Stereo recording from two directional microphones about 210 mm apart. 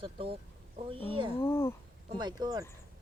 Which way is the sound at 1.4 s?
10° left (ahead or behind).